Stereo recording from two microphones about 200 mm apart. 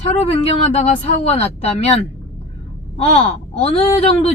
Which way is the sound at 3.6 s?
30° left (ahead or behind).